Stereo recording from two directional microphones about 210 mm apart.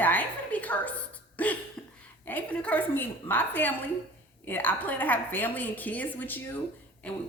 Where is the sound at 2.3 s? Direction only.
5° left (ahead or behind).